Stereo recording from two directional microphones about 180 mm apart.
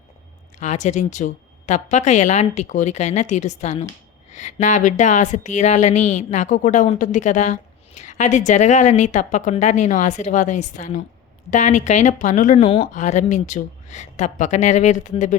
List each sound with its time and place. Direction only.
0.6 s a woman's voice: 40° left (ahead or behind)
12.6 s speech: 30° left (ahead or behind)
12.9 s a woman's voice: 40° left (ahead or behind)